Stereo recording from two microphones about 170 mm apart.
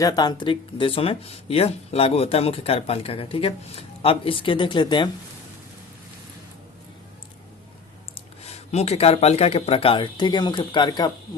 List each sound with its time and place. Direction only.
0.0 s speech: 20° left (ahead or behind)
8.1 s speech: 40° left (ahead or behind)